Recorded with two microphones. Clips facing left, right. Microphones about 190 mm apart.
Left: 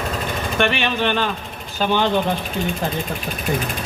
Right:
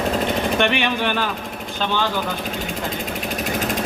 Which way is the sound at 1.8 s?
20° left (ahead or behind).